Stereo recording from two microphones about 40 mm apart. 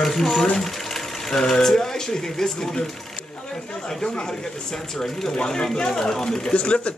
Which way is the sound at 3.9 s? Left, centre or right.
Centre.